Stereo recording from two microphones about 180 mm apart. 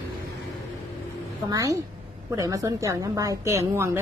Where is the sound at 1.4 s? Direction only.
20° right (ahead or behind).